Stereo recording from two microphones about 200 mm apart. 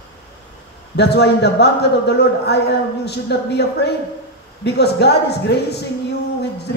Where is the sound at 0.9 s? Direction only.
55° left (ahead or behind).